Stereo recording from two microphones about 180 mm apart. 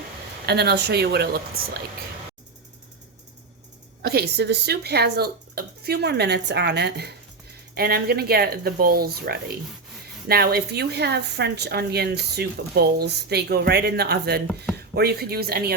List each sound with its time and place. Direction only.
0.4 s a woman's voice: 65° right (ahead or behind)
4.0 s a woman's voice: 60° right (ahead or behind)